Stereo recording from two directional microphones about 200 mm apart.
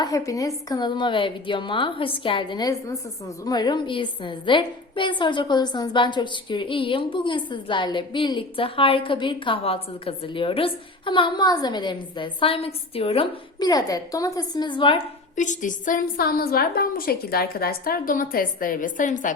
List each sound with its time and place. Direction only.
0.0 s a woman's voice: 15° left (ahead or behind)
15.4 s a woman's voice: 40° left (ahead or behind)